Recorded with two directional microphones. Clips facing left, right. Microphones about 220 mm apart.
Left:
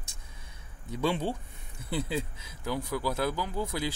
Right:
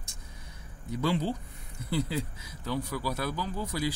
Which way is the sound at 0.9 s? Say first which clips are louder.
Even; 25° left (ahead or behind).